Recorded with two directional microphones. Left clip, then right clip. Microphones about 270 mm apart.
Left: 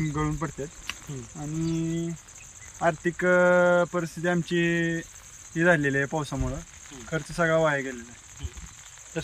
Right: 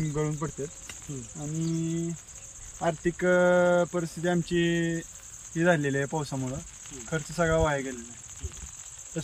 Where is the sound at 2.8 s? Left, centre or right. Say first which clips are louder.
Left 3 dB; centre.